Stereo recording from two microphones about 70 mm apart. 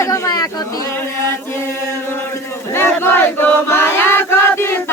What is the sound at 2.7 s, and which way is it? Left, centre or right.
Chant, left.